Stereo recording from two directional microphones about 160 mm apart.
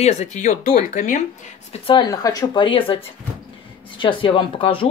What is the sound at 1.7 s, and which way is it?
Speech, 35° left (ahead or behind).